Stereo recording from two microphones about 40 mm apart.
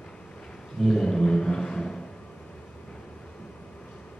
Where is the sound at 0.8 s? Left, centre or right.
Centre.